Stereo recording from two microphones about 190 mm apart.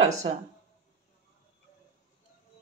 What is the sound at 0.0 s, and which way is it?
Speech, 35° right (ahead or behind).